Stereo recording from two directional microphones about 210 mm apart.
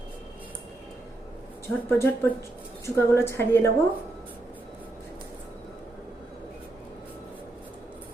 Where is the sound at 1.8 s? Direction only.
10° left (ahead or behind).